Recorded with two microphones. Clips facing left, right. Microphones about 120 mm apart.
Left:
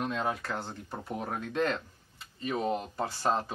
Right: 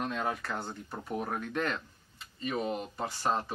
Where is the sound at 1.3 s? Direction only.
30° left (ahead or behind).